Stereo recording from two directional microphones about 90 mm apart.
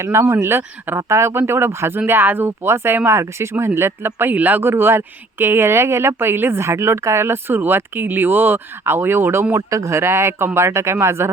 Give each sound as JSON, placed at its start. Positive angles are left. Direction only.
{"t": 0.0, "sound": "speech", "side_deg": -30}